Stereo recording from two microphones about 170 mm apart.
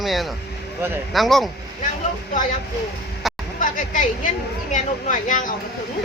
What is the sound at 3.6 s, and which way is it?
A woman's voice, 50° left (ahead or behind).